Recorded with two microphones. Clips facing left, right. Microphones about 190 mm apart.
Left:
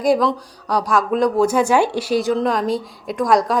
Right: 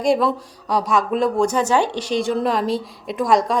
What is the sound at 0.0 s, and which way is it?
A woman's voice, centre (ahead or behind).